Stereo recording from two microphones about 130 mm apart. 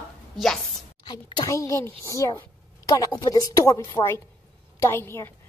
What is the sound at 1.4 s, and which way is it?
Speech, 25° left (ahead or behind).